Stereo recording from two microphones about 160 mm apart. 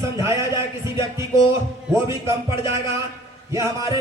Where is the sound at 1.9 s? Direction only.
20° right (ahead or behind).